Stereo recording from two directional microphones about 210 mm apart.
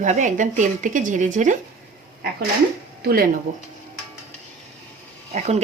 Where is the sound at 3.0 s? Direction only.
45° right (ahead or behind).